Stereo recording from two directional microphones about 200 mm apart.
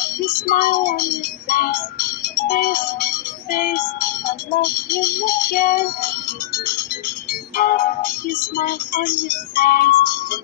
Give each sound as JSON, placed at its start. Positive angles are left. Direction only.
{"t": 0.5, "sound": "music", "side_deg": 45}
{"t": 2.3, "sound": "speech", "side_deg": 45}
{"t": 4.6, "sound": "music", "side_deg": 45}
{"t": 7.5, "sound": "music", "side_deg": 45}